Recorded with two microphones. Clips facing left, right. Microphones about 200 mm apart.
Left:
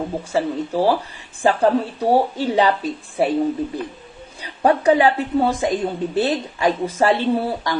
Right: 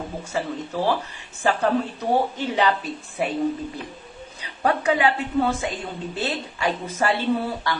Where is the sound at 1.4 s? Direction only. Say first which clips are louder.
Left 5 dB; 30° left (ahead or behind).